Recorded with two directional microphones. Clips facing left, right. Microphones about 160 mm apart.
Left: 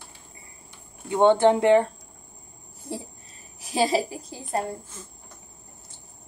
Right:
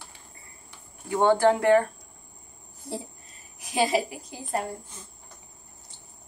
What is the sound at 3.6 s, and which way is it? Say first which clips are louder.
A woman's voice: left 1 dB; 30° left (ahead or behind).